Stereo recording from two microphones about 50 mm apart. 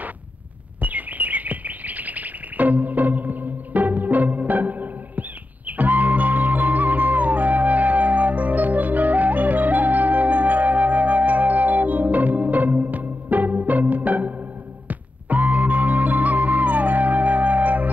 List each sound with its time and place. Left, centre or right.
0.7 s chirp: right
5.7 s music: right